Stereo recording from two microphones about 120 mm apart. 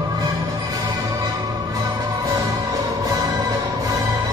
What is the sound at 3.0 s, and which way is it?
Music, 30° right (ahead or behind).